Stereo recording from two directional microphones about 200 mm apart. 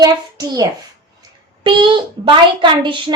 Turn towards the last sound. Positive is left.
turn(degrees=-25)  # may be behind; listen again after turning